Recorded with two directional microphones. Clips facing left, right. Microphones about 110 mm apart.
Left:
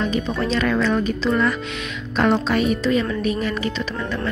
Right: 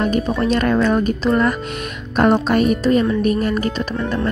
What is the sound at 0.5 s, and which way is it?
Speech, 45° right (ahead or behind).